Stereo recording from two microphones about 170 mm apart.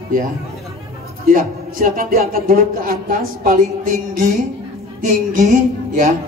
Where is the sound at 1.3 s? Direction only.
55° right (ahead or behind).